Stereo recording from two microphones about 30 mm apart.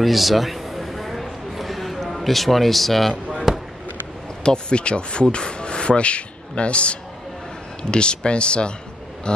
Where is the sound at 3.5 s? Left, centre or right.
Centre.